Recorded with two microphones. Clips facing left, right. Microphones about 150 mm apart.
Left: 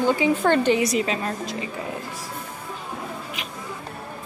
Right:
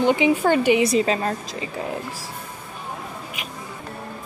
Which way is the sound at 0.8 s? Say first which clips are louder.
Right 4 dB; 30° right (ahead or behind).